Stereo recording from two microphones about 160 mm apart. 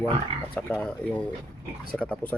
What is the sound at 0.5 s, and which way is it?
Speech, 10° left (ahead or behind).